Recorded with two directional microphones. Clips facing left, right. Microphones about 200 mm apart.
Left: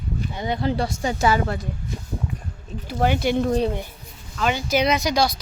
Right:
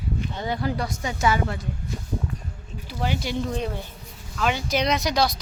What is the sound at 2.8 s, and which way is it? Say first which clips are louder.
Speech: left 7 dB; 55° left (ahead or behind).